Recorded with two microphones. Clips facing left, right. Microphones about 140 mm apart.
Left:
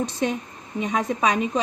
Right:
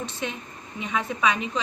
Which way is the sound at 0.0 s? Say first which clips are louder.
Left 7 dB; 45° left (ahead or behind).